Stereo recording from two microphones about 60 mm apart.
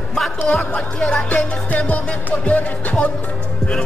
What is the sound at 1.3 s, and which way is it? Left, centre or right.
Music, left.